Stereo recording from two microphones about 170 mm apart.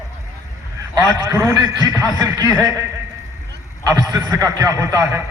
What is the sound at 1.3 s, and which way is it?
Speech, 15° right (ahead or behind).